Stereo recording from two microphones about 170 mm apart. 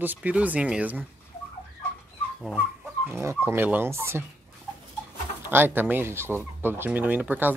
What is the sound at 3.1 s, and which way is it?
Speech, 15° right (ahead or behind).